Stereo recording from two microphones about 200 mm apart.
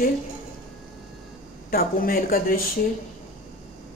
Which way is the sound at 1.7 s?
45° left (ahead or behind).